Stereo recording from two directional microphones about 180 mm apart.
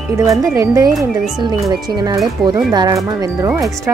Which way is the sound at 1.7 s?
20° right (ahead or behind).